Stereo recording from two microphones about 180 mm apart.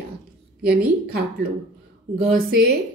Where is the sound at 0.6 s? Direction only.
60° right (ahead or behind).